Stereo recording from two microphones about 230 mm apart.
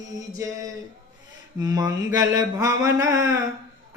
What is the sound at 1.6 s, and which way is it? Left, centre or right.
Singing, centre.